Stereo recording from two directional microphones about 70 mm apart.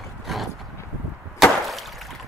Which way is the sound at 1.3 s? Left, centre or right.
Centre.